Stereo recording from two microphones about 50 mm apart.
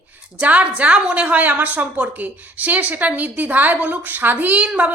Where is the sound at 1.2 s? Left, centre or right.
Right.